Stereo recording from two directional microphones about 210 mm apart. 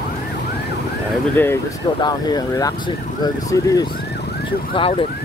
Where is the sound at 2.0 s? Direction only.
20° left (ahead or behind).